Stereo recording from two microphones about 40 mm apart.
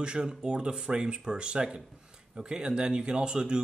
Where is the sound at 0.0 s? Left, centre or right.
Right.